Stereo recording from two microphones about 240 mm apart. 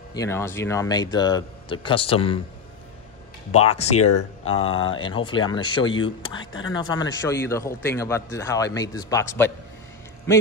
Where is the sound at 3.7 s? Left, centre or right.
Left.